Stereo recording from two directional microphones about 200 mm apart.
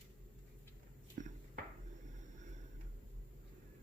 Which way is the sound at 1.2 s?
40° right (ahead or behind).